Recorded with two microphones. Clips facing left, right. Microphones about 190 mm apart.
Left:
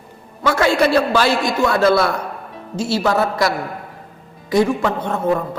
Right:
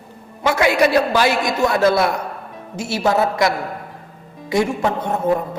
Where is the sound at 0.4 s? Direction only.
20° right (ahead or behind).